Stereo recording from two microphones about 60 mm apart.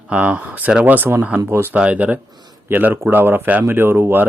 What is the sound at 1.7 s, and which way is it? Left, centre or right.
Speech, right.